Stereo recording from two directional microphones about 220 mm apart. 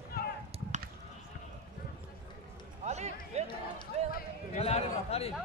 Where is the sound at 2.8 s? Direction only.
30° right (ahead or behind).